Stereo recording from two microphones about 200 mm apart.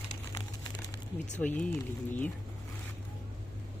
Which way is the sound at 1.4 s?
5° left (ahead or behind).